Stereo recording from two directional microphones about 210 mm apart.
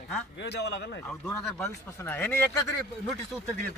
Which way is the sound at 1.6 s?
10° left (ahead or behind).